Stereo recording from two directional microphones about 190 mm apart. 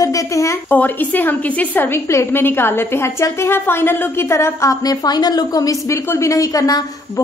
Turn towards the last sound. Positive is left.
turn(degrees=20)  # may be behind; listen again after turning